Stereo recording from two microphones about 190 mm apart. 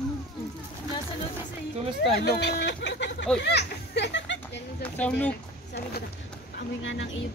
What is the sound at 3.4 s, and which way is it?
Speech, 60° left (ahead or behind).